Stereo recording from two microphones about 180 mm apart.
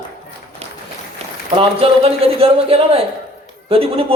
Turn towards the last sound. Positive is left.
turn(degrees=-30)  # may be behind; listen again after turning